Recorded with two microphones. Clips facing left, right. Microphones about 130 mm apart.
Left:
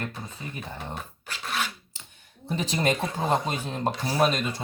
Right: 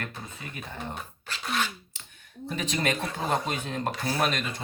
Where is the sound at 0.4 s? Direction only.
30° left (ahead or behind).